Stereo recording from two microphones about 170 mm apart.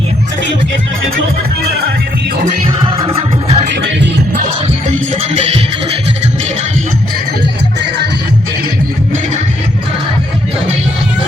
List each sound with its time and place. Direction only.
3.1 s music: 35° right (ahead or behind)
4.9 s music: 40° right (ahead or behind)